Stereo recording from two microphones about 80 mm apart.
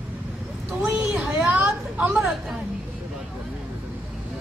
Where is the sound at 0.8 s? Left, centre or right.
Centre.